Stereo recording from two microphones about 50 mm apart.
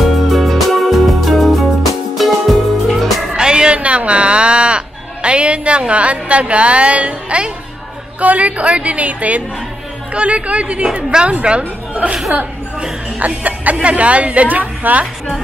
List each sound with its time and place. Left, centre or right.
0.0 s music: centre
3.3 s a sound: centre
8.2 s a woman's voice: right
13.2 s a woman's voice: right